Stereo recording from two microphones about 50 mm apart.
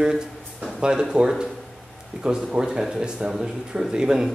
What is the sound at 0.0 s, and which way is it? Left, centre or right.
A man's voice, centre.